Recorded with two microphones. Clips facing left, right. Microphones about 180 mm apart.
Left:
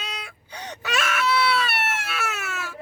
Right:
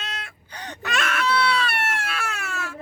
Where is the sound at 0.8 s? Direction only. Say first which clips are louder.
Even; 5° left (ahead or behind).